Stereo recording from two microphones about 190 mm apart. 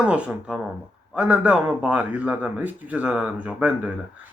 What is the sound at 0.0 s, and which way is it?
Speech, 5° right (ahead or behind).